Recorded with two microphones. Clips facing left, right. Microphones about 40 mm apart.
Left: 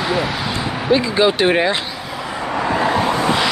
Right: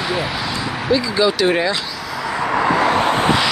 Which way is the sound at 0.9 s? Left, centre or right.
Left.